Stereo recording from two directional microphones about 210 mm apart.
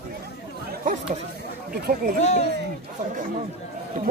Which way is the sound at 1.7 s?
45° right (ahead or behind).